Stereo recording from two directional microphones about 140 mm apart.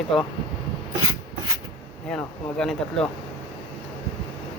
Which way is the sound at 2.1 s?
5° left (ahead or behind).